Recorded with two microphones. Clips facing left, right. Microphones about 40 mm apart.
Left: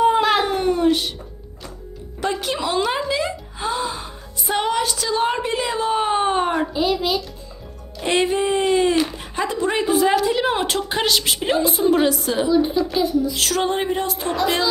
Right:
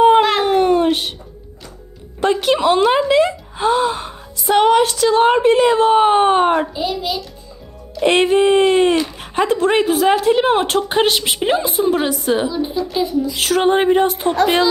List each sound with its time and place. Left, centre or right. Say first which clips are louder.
0.0 s a sound: right 5 dB; right
2.2 s speech: right 8 dB; right
8.0 s speech: right 6 dB; right
10.3 s a sound: right 5 dB; right
11.2 s a woman's voice: right 2 dB; centre
11.7 s a woman's voice: even; centre
12.2 s a woman's voice: right 4 dB; centre
12.5 s a woman's voice: left 3 dB; centre
13.3 s a sound: right 6 dB; right